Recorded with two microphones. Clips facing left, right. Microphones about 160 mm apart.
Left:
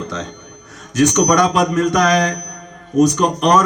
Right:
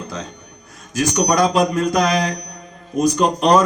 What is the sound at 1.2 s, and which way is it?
A man's voice, 30° right (ahead or behind).